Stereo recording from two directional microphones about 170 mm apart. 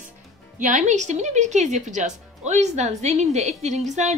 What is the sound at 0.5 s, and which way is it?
A woman's voice, 45° right (ahead or behind).